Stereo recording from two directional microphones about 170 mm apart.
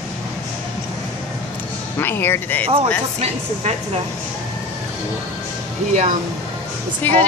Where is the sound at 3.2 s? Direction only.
35° right (ahead or behind).